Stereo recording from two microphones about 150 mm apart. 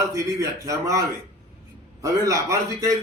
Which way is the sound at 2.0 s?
20° right (ahead or behind).